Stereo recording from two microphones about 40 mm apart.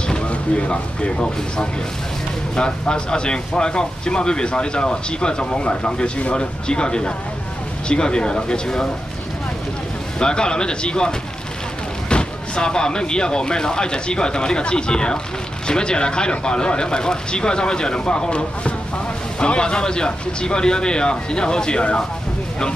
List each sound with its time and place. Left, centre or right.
0.3 s speech: left
10.1 s speech: left